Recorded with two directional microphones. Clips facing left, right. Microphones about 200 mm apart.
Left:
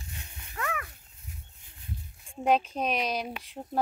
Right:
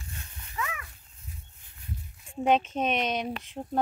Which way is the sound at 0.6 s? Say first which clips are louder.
Left 1 dB; 65° left (ahead or behind).